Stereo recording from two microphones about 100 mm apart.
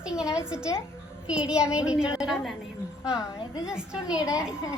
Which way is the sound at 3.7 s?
5° right (ahead or behind).